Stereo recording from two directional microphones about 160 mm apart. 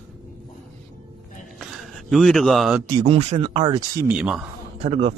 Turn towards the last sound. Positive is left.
turn(degrees=-40)  # may be behind; listen again after turning